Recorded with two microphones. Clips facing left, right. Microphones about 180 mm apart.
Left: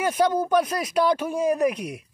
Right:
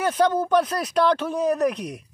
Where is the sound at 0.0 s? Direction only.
10° left (ahead or behind).